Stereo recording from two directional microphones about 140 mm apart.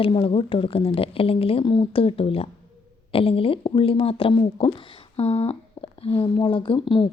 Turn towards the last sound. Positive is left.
turn(degrees=35)  # may be behind; listen again after turning